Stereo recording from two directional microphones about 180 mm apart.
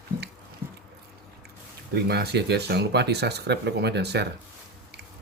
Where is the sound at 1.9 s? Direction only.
65° right (ahead or behind).